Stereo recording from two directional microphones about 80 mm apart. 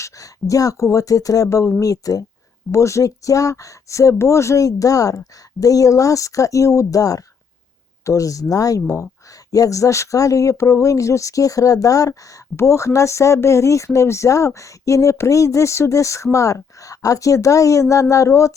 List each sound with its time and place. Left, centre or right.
0.0 s speech: left